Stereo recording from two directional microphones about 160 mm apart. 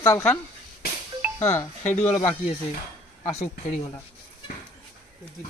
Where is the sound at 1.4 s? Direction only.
15° left (ahead or behind).